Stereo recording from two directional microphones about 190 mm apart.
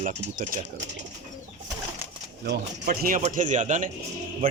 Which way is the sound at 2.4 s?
50° right (ahead or behind).